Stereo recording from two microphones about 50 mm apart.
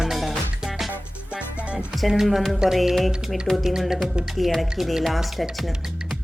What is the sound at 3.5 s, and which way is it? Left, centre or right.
Speech, left.